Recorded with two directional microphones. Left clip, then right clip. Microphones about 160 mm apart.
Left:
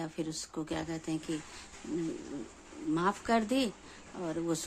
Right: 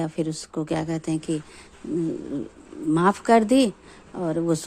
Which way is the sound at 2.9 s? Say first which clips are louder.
Right 12 dB; 40° right (ahead or behind).